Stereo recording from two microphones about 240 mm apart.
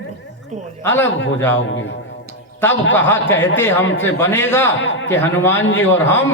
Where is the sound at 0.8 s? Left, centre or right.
Centre.